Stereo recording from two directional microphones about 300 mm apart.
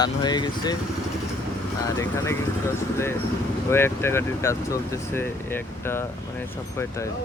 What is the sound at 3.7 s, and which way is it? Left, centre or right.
Speech, centre.